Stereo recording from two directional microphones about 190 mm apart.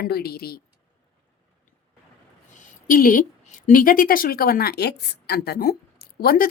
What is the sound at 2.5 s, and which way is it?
Speech, 45° left (ahead or behind).